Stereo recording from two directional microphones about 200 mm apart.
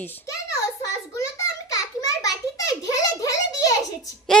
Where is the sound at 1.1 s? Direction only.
15° left (ahead or behind).